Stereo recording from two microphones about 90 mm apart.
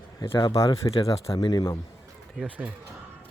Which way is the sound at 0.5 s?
40° left (ahead or behind).